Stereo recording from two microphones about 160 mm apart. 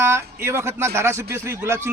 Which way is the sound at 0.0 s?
15° right (ahead or behind).